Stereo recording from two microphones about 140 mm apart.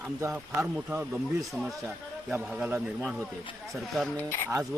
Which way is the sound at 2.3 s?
5° right (ahead or behind).